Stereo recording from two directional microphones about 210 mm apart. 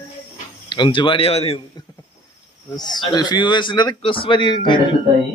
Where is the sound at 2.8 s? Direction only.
20° left (ahead or behind).